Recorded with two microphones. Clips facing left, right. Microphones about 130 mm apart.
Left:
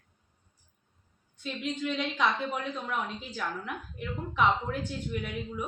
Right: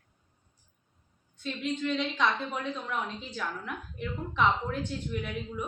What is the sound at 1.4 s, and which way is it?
A woman's voice, 5° left (ahead or behind).